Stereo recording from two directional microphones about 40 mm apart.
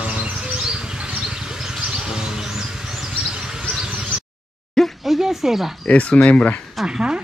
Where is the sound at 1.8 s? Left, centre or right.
Centre.